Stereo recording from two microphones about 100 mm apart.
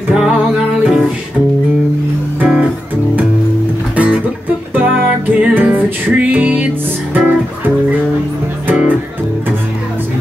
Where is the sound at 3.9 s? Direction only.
15° right (ahead or behind).